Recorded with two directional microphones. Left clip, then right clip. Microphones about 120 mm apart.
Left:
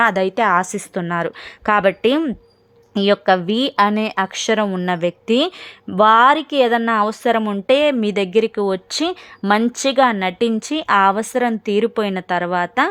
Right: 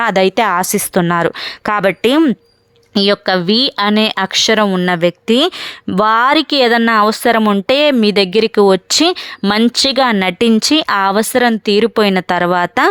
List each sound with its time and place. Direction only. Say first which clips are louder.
0.0 s speech: right 4 dB; 35° right (ahead or behind)
1.6 s speech: right 2 dB; 35° right (ahead or behind)
8.3 s a woman's voice: right 5 dB; 50° right (ahead or behind)
9.4 s speech: right 3 dB; 30° right (ahead or behind)
9.9 s a woman's voice: right 3 dB; 45° right (ahead or behind)
11.0 s speech: right 4 dB; 30° right (ahead or behind)